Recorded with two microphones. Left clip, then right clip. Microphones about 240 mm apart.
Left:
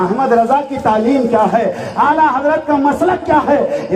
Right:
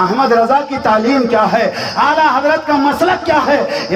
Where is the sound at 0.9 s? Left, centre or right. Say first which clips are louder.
Even; right.